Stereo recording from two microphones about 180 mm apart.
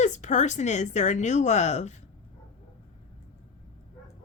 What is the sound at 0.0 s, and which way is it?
Speech, 40° left (ahead or behind).